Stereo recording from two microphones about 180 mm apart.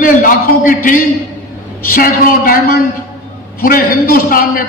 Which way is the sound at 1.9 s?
50° left (ahead or behind).